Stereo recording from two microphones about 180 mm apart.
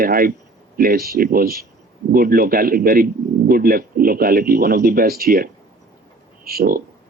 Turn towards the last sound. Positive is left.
turn(degrees=-55)  # may be behind; listen again after turning